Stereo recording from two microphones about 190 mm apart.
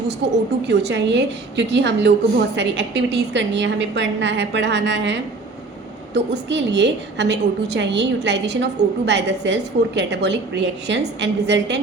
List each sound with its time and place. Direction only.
0.2 s a woman's voice: 70° right (ahead or behind)